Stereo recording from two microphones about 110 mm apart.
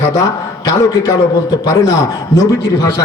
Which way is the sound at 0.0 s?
30° left (ahead or behind).